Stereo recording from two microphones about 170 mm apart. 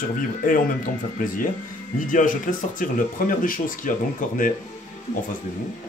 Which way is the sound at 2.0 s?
50° left (ahead or behind).